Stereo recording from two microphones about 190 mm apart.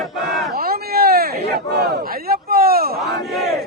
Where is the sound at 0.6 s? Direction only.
55° right (ahead or behind).